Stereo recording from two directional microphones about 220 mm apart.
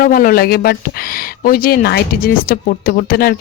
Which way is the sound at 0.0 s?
40° left (ahead or behind).